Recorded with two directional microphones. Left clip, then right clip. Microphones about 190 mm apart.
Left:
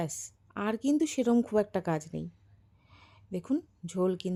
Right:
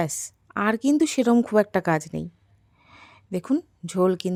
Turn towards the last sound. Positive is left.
turn(degrees=-15)  # may be behind; listen again after turning